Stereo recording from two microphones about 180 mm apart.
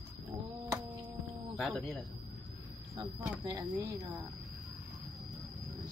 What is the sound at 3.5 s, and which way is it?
Speech, 15° right (ahead or behind).